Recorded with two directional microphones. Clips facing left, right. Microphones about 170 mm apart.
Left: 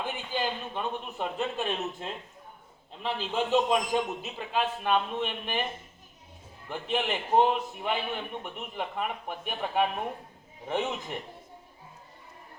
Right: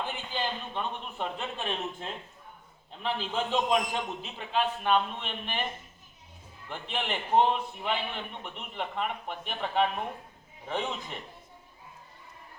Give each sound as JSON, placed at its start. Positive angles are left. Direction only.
{"t": 0.0, "sound": "a man's voice", "side_deg": 10}
{"t": 6.7, "sound": "a man's voice", "side_deg": 5}